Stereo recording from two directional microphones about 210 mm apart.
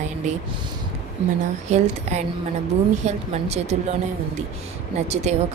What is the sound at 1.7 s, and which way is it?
A woman's voice, 30° right (ahead or behind).